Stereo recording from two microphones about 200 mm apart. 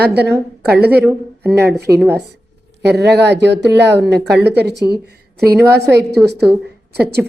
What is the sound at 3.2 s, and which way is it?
A woman's voice, 60° right (ahead or behind).